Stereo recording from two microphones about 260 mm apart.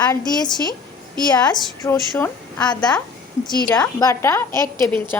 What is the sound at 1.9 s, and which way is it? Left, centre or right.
A woman's voice, centre.